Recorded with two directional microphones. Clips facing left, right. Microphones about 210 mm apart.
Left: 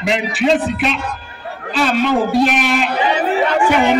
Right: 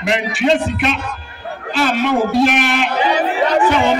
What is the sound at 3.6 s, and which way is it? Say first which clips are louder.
Speech: even; 10° left (ahead or behind).